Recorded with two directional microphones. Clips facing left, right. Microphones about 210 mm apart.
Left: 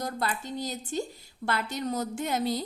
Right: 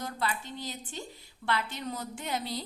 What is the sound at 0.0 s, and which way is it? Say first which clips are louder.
A woman's voice: left 3 dB; 40° left (ahead or behind).